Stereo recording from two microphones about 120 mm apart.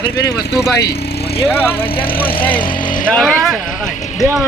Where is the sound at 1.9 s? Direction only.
45° left (ahead or behind).